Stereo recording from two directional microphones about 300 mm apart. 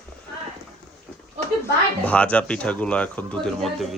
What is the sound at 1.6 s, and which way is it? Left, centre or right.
Speech, centre.